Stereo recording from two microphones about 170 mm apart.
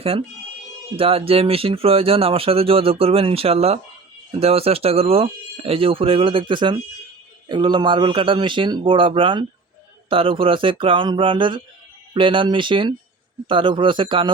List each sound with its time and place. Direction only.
0.9 s a man's voice: 35° right (ahead or behind)